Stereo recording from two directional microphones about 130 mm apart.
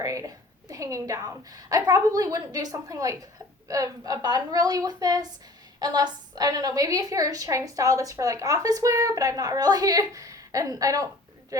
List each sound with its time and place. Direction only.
0.0 s a woman's voice: 25° right (ahead or behind)